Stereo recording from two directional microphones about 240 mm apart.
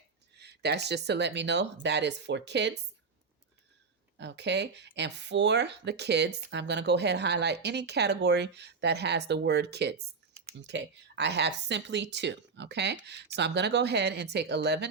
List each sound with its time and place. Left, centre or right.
0.3 s speech: right
4.2 s speech: right